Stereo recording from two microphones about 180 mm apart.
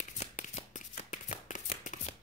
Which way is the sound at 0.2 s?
40° left (ahead or behind).